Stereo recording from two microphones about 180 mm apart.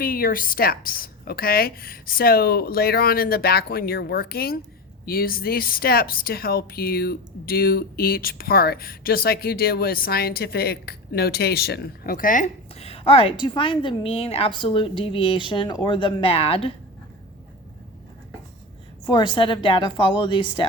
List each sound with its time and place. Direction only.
0.0 s speech: 55° left (ahead or behind); by 16.7 s 30° left (ahead or behind)
19.0 s a woman's voice: 25° left (ahead or behind)